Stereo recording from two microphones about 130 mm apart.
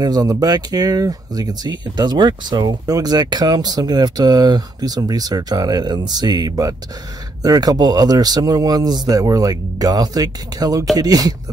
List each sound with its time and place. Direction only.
0.0 s speech: 30° right (ahead or behind)